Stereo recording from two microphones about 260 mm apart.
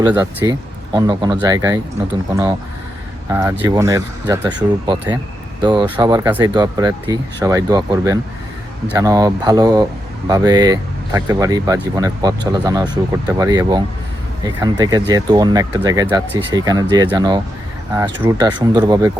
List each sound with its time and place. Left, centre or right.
0.0 s speech: centre
3.2 s speech: centre